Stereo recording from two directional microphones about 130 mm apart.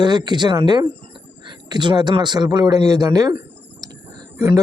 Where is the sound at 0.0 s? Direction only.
35° right (ahead or behind).